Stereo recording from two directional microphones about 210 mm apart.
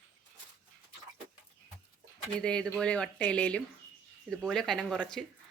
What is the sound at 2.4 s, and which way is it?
Speech, 5° left (ahead or behind).